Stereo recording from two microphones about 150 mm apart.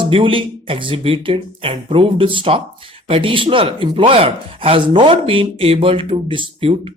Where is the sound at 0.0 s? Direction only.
35° right (ahead or behind).